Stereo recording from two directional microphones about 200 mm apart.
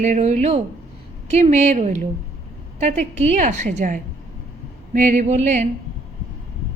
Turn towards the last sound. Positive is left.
turn(degrees=-35)  # may be behind; listen again after turning